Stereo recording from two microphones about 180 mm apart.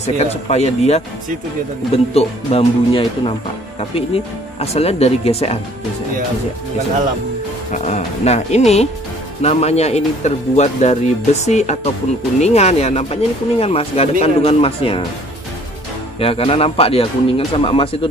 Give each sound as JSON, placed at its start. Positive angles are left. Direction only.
{"t": 0.0, "sound": "speech", "side_deg": 35}
{"t": 2.1, "sound": "speech", "side_deg": 30}
{"t": 7.7, "sound": "speech", "side_deg": 40}
{"t": 16.2, "sound": "speech", "side_deg": 30}